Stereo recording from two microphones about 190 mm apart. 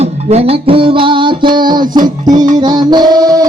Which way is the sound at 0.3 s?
30° right (ahead or behind).